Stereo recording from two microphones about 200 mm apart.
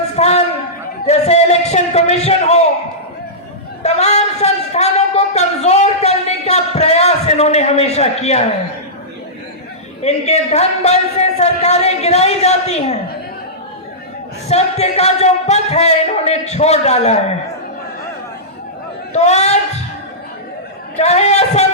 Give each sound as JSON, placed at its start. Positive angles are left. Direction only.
{"t": 0.2, "sound": "a man's voice", "side_deg": 30}
{"t": 3.8, "sound": "speech", "side_deg": 30}
{"t": 10.0, "sound": "a man's voice", "side_deg": 30}
{"t": 14.4, "sound": "a man's voice", "side_deg": 30}
{"t": 19.1, "sound": "a man's voice", "side_deg": 35}
{"t": 21.0, "sound": "a man's voice", "side_deg": 35}